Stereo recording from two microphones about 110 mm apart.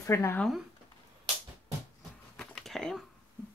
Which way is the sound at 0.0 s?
25° left (ahead or behind).